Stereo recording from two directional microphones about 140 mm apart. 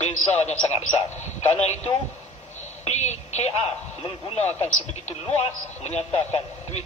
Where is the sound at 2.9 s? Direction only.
55° left (ahead or behind).